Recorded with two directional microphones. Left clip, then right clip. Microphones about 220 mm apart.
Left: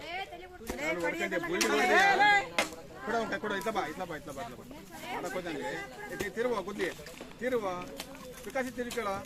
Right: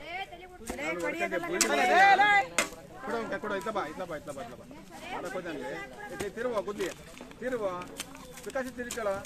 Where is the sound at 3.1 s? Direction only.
30° left (ahead or behind).